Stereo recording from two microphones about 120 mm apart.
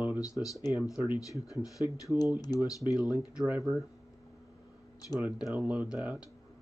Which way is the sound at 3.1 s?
15° right (ahead or behind).